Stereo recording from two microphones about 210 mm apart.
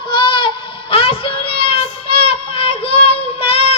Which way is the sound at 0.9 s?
25° left (ahead or behind).